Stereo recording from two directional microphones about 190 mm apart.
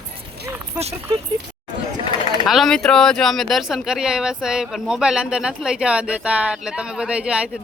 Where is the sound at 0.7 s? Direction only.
35° right (ahead or behind).